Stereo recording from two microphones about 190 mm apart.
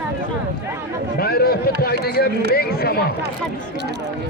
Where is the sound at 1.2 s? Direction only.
55° left (ahead or behind).